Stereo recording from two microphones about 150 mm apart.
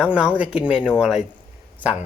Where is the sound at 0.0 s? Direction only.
5° right (ahead or behind).